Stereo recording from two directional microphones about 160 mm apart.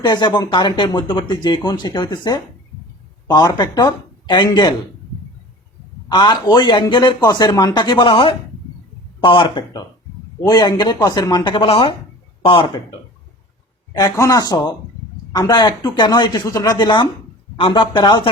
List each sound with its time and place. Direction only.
0.0 s speech: 25° left (ahead or behind)
6.1 s speech: 25° left (ahead or behind)
13.9 s speech: 20° left (ahead or behind)